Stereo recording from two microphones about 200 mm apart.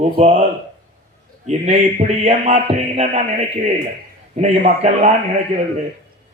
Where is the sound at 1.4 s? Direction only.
35° right (ahead or behind).